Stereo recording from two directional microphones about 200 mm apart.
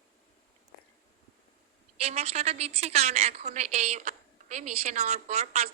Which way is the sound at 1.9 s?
30° right (ahead or behind).